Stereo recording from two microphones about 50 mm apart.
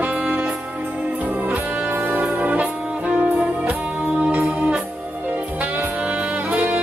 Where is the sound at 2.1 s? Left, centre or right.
Right.